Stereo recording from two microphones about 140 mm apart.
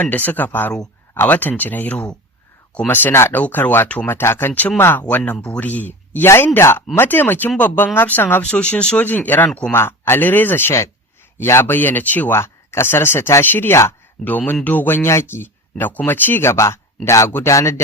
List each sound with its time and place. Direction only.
0.0 s speech: 10° left (ahead or behind)
9.7 s speech: 15° left (ahead or behind)